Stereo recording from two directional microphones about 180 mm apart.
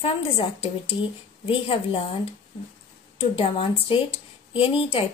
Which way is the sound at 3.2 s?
30° left (ahead or behind).